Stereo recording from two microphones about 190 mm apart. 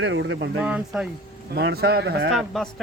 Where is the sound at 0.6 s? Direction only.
5° right (ahead or behind).